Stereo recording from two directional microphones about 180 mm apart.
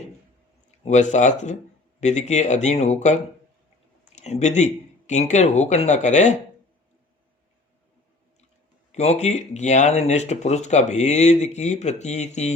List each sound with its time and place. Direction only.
0.9 s speech: 40° left (ahead or behind)
8.9 s speech: 40° left (ahead or behind)